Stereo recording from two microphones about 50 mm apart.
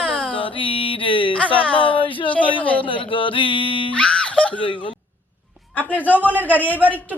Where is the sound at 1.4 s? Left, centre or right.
Left.